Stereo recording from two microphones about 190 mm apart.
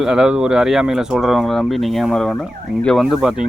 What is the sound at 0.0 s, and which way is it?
Speech, 5° right (ahead or behind).